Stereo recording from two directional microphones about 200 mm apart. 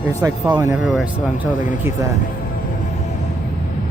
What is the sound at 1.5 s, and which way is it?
Speech, 40° left (ahead or behind).